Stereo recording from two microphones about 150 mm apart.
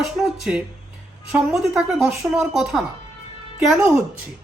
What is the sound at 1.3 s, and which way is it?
A woman's voice, 5° right (ahead or behind).